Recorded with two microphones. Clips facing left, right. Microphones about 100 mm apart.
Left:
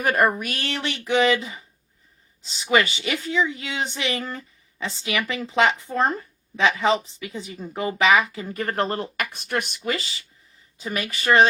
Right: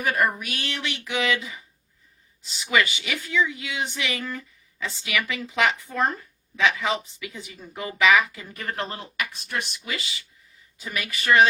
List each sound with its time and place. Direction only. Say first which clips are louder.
0.0 s a woman's voice: left 4 dB; 50° left (ahead or behind); by 11.4 s 30° left (ahead or behind)